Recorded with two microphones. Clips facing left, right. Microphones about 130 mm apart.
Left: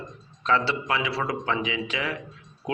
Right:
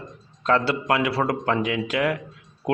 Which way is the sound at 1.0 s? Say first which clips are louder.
Right 5 dB; 55° right (ahead or behind).